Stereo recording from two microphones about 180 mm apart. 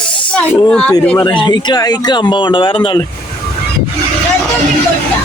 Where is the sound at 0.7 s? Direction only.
5° left (ahead or behind).